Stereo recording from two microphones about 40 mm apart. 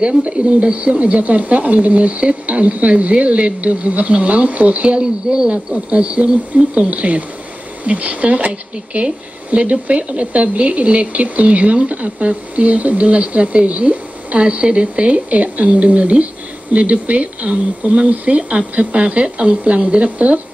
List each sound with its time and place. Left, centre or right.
0.0 s speech: right
5.9 s speech: right